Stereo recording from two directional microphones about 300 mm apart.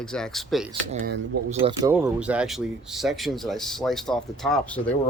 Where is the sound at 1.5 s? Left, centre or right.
Centre.